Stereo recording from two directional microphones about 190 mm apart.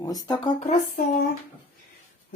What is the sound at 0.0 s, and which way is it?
Speech, 20° left (ahead or behind).